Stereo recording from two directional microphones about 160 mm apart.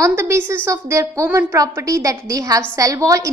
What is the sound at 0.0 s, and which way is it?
A woman's voice, 15° right (ahead or behind).